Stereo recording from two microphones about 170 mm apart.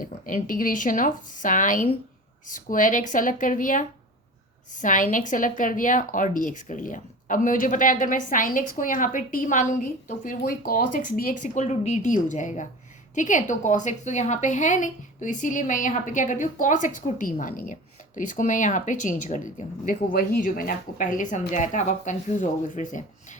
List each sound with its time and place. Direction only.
0.0 s a woman's voice: 55° left (ahead or behind)